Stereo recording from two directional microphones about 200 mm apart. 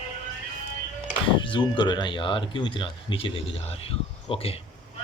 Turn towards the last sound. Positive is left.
turn(degrees=30)  # may be behind; listen again after turning